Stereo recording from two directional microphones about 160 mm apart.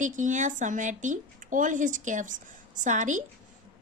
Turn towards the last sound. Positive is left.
turn(degrees=-50)  # may be behind; listen again after turning